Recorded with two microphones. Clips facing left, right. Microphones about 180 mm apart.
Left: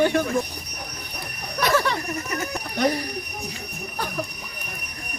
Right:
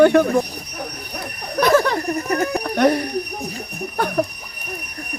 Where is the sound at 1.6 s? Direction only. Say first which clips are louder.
Right 6 dB; 45° right (ahead or behind); by 3.0 s 65° right (ahead or behind).